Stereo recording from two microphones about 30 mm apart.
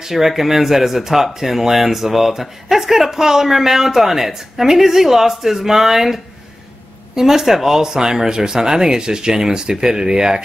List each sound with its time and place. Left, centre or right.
0.0 s a man's voice: centre